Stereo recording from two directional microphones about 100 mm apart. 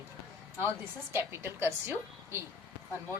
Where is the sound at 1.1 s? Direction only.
25° right (ahead or behind).